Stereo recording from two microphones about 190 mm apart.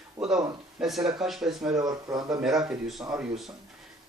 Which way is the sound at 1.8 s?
20° right (ahead or behind).